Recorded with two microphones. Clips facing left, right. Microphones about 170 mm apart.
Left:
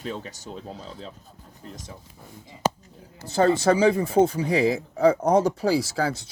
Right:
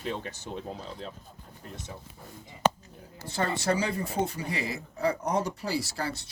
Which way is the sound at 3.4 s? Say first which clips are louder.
Left 10 dB; 90° left.